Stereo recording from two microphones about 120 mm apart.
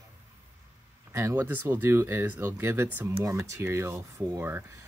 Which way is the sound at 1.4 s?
15° right (ahead or behind).